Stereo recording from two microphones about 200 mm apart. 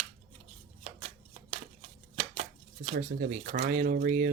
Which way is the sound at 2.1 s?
35° right (ahead or behind).